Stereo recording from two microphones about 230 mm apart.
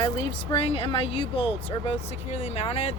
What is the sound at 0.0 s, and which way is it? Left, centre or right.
Speech, left.